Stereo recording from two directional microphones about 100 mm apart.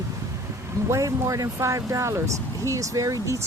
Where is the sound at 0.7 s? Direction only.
30° right (ahead or behind).